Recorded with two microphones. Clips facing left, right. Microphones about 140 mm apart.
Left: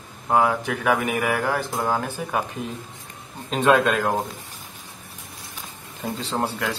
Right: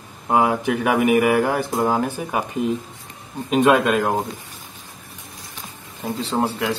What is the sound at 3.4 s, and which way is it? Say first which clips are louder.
Speech: right 3 dB; 10° right (ahead or behind).